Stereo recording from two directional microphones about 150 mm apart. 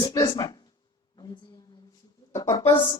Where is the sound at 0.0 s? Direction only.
25° left (ahead or behind).